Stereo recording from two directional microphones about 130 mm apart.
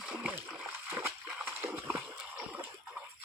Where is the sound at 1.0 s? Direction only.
5° right (ahead or behind).